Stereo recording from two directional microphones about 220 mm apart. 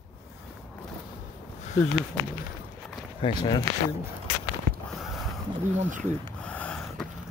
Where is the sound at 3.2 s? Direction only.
20° left (ahead or behind).